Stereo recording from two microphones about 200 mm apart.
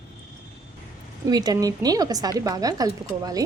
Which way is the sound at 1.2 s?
20° right (ahead or behind).